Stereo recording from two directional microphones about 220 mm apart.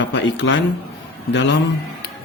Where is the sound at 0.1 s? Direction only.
55° left (ahead or behind).